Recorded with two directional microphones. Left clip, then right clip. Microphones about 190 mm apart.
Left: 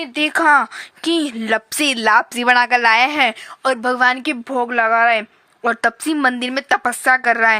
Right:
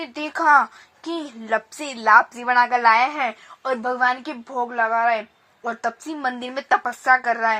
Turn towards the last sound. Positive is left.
turn(degrees=30)  # may be behind; listen again after turning